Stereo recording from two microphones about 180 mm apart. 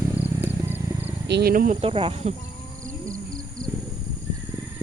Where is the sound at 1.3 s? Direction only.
60° right (ahead or behind).